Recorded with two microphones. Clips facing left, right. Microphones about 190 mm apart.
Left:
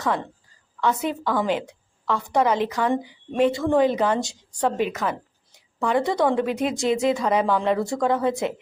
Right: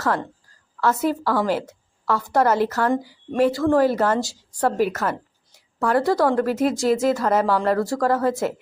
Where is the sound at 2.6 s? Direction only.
15° left (ahead or behind).